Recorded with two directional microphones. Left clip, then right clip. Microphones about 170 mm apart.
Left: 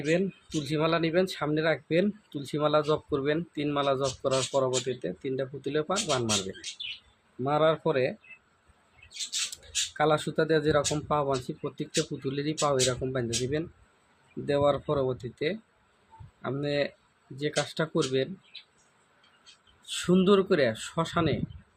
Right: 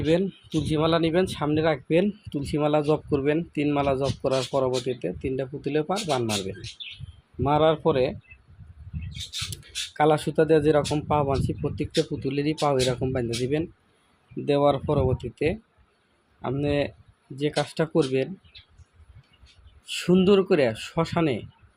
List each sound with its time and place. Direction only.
0.0 s speech: 20° right (ahead or behind)
10.0 s speech: 25° right (ahead or behind)
16.4 s speech: 25° right (ahead or behind)
19.9 s speech: 20° right (ahead or behind)